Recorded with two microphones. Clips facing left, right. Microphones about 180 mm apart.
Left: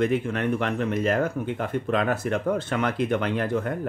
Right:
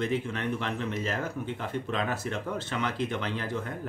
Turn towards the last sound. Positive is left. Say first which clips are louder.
# left 8 dB
turn(degrees=55)  # may be behind; listen again after turning